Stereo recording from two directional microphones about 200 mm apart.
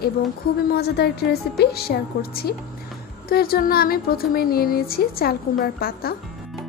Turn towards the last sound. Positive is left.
turn(degrees=50)  # may be behind; listen again after turning